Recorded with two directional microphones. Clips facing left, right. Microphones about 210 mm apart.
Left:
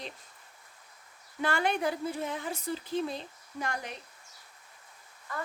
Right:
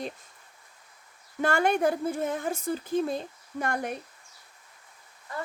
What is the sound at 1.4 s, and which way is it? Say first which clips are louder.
Speech: right 5 dB; 45° right (ahead or behind).